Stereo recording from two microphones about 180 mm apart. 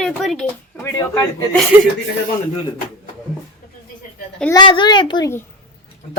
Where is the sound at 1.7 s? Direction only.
10° right (ahead or behind).